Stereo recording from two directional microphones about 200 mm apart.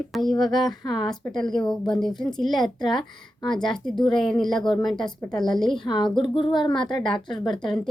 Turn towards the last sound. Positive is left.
turn(degrees=0)  # may be behind; listen again after turning